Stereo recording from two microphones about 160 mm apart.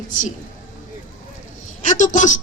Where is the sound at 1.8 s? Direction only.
50° left (ahead or behind).